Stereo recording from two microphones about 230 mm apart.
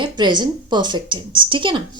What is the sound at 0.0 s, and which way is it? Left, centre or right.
Speech, centre.